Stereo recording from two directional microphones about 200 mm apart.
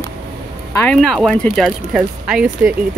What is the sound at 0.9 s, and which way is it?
Speech, centre (ahead or behind).